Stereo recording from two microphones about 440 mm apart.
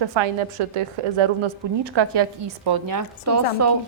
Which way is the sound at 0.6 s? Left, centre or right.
Right.